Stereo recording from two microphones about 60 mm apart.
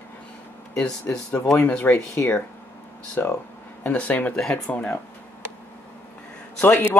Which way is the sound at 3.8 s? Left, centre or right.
Left.